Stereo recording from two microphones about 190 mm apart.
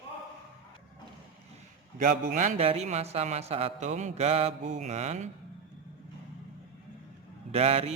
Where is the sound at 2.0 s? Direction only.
40° right (ahead or behind).